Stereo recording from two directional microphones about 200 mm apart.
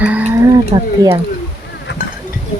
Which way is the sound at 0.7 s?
25° right (ahead or behind).